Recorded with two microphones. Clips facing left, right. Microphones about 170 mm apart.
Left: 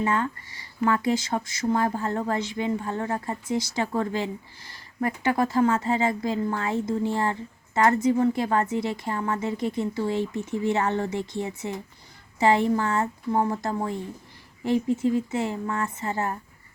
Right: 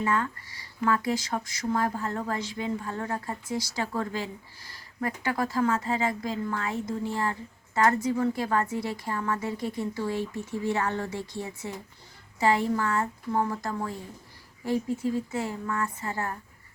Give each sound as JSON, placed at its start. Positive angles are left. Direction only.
{"t": 0.0, "sound": "speech", "side_deg": 25}